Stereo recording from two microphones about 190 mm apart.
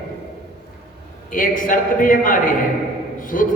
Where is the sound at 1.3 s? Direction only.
45° left (ahead or behind).